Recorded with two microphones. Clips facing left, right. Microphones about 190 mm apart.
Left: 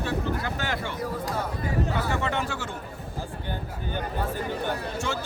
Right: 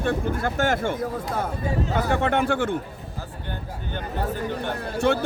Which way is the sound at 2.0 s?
55° right (ahead or behind).